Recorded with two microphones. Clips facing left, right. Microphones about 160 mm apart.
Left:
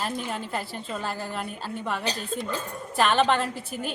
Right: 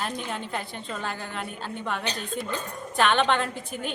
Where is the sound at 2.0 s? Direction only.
35° left (ahead or behind).